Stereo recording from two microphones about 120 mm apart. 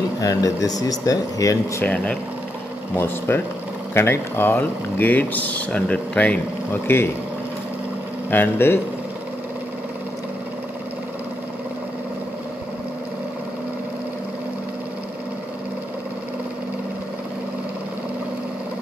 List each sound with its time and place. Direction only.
0.2 s speech: 30° left (ahead or behind)
1.8 s speech: 10° left (ahead or behind)
3.3 s speech: 20° left (ahead or behind)
8.3 s speech: 20° left (ahead or behind)